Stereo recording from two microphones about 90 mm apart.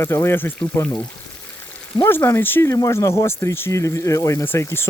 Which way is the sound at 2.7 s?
40° left (ahead or behind).